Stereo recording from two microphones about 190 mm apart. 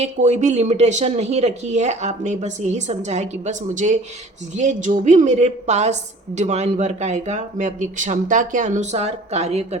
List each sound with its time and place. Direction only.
0.0 s a woman's voice: 40° right (ahead or behind)